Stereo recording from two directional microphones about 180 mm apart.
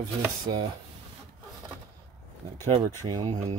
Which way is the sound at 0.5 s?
25° right (ahead or behind).